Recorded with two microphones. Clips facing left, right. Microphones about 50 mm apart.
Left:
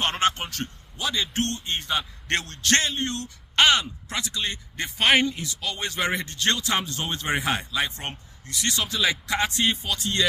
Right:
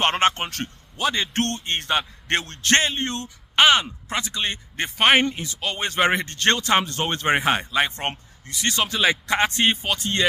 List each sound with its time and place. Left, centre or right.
0.0 s a man's voice: right
2.2 s speech: right
3.2 s speech: centre
4.1 s speech: right